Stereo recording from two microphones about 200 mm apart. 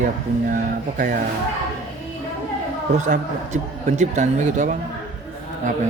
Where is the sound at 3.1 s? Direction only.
35° right (ahead or behind).